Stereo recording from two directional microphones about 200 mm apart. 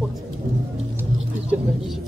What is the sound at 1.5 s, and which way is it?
Bird, 5° right (ahead or behind).